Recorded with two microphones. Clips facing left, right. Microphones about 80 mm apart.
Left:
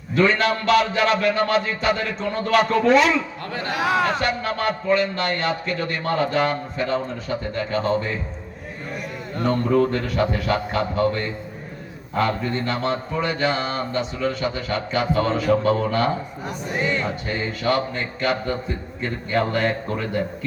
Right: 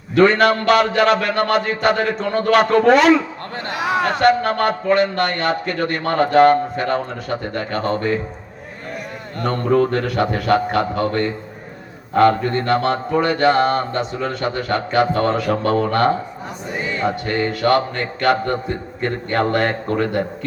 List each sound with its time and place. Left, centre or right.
0.2 s a man's voice: right
3.8 s speech: centre
4.0 s a man's voice: right
9.4 s a man's voice: right